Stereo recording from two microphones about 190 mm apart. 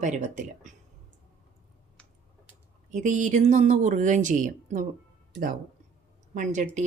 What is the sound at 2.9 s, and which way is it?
Speech, 40° right (ahead or behind).